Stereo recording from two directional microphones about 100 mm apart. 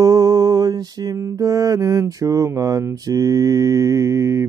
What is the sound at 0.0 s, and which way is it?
Music, 35° right (ahead or behind).